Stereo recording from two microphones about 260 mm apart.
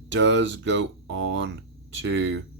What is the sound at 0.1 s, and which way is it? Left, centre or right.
Speech, right.